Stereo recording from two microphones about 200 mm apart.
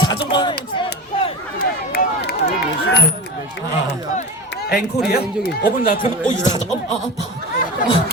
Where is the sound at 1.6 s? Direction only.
50° left (ahead or behind).